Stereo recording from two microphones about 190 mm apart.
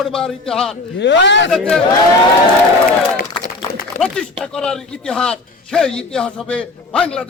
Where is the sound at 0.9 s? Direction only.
70° left (ahead or behind).